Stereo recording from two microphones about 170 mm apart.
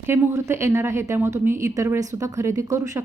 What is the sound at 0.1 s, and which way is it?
A woman's voice, 15° right (ahead or behind).